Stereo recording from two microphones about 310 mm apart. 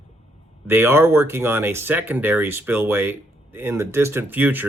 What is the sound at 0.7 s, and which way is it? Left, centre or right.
Speech, centre.